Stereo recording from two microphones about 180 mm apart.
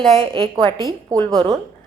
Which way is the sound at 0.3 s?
25° right (ahead or behind).